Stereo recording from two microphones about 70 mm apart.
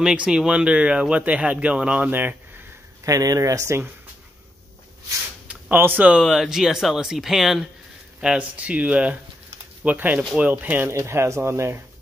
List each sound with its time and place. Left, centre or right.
0.0 s speech: centre; by 2.3 s right
3.1 s speech: right
5.8 s speech: right
6.2 s speech: centre
8.2 s speech: centre
10.9 s speech: right